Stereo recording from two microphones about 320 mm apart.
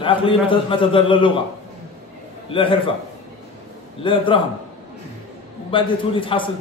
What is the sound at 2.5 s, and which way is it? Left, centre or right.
Speech, centre.